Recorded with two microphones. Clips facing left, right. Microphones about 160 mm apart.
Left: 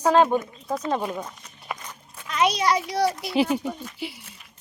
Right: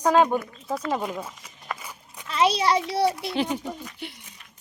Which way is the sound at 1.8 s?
10° right (ahead or behind).